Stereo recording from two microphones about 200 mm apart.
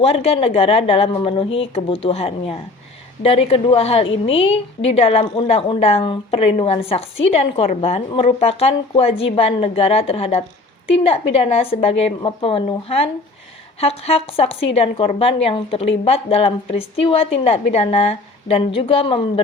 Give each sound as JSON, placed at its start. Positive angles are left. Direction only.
{"t": 0.0, "sound": "a woman's voice", "side_deg": 30}